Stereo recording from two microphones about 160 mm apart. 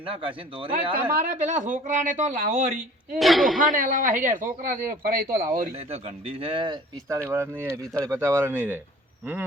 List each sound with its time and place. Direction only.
0.0 s speech: 35° right (ahead or behind)
1.3 s speech: 50° right (ahead or behind)
3.2 s a man's voice: centre (ahead or behind)
3.6 s speech: 55° right (ahead or behind)
5.7 s speech: 40° right (ahead or behind)
7.1 s speech: 15° right (ahead or behind)